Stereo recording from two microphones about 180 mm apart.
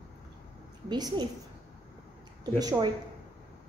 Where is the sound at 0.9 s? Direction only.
25° right (ahead or behind).